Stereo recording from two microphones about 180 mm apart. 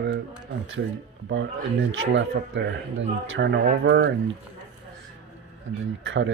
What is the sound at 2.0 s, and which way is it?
Speech, 90° right.